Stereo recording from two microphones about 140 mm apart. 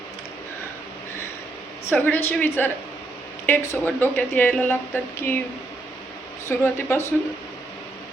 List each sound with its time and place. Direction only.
1.9 s a woman's voice: 15° left (ahead or behind)
6.5 s speech: 15° left (ahead or behind)